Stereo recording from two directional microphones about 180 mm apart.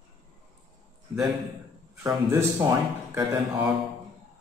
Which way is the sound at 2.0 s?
15° right (ahead or behind).